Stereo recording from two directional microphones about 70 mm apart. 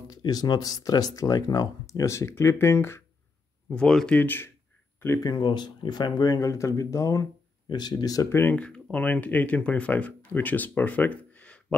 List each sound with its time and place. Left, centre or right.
0.1 s speech: left
3.7 s speech: centre
4.1 s speech: left
5.2 s speech: left
6.5 s speech: left
7.6 s speech: left
8.3 s speech: left
8.5 s speech: centre